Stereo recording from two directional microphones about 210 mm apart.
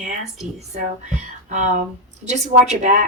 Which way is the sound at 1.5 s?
35° right (ahead or behind).